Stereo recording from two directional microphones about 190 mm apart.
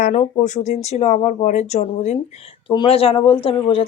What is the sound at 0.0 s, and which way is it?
Speech, 40° left (ahead or behind).